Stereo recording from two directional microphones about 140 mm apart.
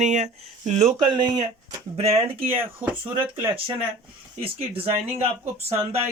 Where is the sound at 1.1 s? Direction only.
30° right (ahead or behind).